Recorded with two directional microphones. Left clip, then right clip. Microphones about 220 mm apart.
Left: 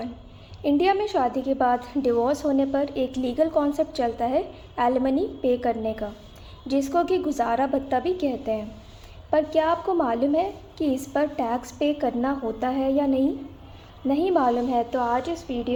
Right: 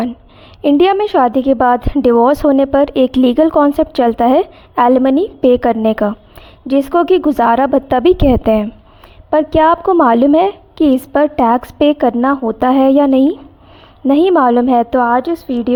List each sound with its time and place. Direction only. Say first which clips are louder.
0.6 s a woman's voice: right 11 dB; 40° right (ahead or behind)